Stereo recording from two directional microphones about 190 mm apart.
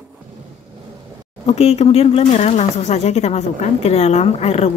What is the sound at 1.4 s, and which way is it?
Speech, 35° left (ahead or behind).